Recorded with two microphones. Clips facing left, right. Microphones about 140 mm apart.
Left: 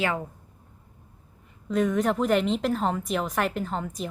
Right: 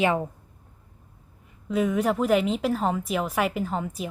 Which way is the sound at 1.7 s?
5° right (ahead or behind).